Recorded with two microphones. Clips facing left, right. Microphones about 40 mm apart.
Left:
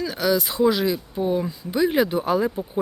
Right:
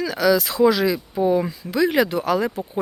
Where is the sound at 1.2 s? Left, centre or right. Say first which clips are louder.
Right 4 dB; right.